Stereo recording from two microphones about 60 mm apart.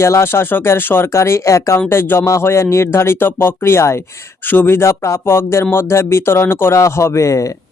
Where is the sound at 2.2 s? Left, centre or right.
Left.